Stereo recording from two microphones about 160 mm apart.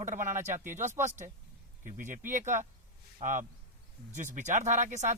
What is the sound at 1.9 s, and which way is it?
Speech, 55° right (ahead or behind).